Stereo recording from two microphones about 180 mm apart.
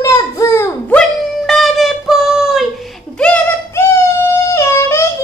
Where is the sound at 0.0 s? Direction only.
15° left (ahead or behind).